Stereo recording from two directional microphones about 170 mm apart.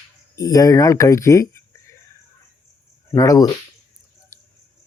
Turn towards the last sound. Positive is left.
turn(degrees=20)  # may be behind; listen again after turning